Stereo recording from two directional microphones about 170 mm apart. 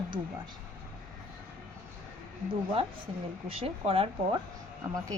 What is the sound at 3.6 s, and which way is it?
Speech, 35° right (ahead or behind).